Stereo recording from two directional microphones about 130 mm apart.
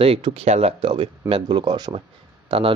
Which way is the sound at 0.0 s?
50° right (ahead or behind).